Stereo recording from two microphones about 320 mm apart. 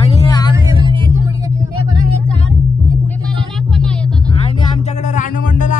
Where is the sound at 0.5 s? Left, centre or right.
Centre.